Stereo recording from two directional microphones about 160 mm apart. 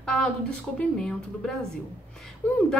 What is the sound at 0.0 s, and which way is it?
A woman's voice, 5° left (ahead or behind).